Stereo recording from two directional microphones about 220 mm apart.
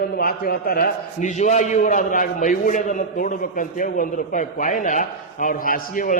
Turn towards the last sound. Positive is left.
turn(degrees=40)  # may be behind; listen again after turning